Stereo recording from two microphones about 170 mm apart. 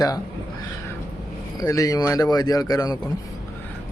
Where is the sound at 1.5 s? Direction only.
20° left (ahead or behind).